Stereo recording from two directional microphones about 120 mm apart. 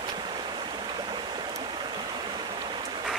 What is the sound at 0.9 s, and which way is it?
Stream, 40° right (ahead or behind).